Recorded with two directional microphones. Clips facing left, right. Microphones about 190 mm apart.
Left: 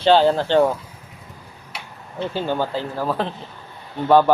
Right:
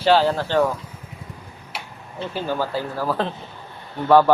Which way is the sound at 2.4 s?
25° left (ahead or behind).